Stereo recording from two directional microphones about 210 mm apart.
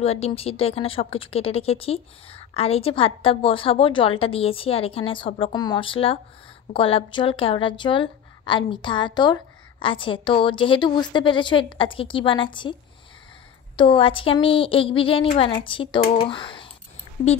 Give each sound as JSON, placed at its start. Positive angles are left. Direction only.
{"t": 0.0, "sound": "a woman's voice", "side_deg": 30}
{"t": 13.7, "sound": "a woman's voice", "side_deg": 25}